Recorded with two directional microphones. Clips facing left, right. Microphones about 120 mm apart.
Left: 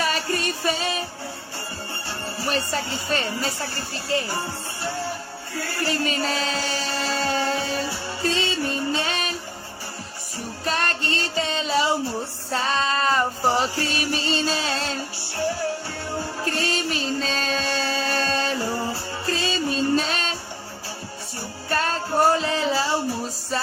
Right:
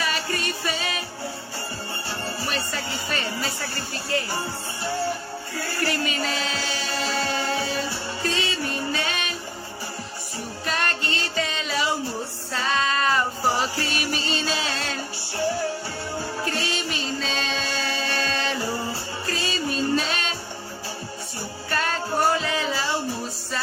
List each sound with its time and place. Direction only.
0.0 s music: 40° left (ahead or behind)
2.5 s speech: 35° left (ahead or behind)
4.1 s music: 30° left (ahead or behind)
5.8 s music: 25° left (ahead or behind)
6.2 s music: 40° left (ahead or behind)
10.7 s music: 35° left (ahead or behind)
12.5 s female singing: 35° left (ahead or behind)
13.7 s music: 35° left (ahead or behind)
16.5 s music: 40° left (ahead or behind)
21.7 s music: 35° left (ahead or behind)